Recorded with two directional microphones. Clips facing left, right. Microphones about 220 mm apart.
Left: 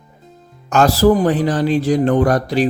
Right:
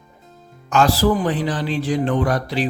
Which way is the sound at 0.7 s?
45° left (ahead or behind).